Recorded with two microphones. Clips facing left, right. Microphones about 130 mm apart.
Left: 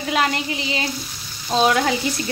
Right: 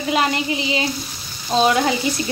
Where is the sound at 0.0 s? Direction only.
5° right (ahead or behind).